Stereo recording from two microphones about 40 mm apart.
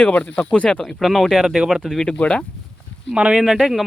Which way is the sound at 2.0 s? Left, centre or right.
Left.